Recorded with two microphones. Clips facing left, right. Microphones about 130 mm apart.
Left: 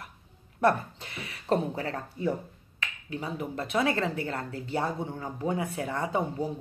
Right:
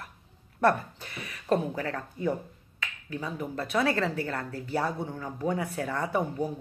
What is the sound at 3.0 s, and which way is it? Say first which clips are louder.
Speech: even; 20° left (ahead or behind).